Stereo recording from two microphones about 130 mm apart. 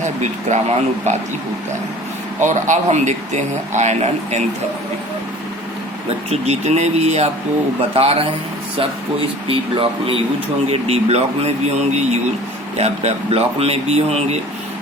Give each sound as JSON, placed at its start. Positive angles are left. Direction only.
{"t": 0.0, "sound": "speech", "side_deg": -65}
{"t": 2.4, "sound": "speech", "side_deg": -65}
{"t": 6.3, "sound": "speech", "side_deg": -55}
{"t": 9.5, "sound": "speech", "side_deg": -45}